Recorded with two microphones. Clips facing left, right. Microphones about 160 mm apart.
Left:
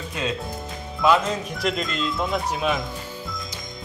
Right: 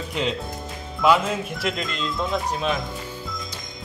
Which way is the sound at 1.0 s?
5° right (ahead or behind).